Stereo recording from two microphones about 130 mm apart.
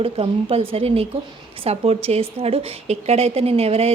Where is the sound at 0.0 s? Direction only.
50° right (ahead or behind).